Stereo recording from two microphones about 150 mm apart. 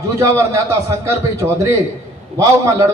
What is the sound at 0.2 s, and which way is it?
A man's voice, 20° right (ahead or behind).